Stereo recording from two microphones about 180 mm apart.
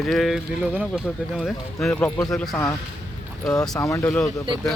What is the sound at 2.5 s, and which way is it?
Speech, 15° left (ahead or behind).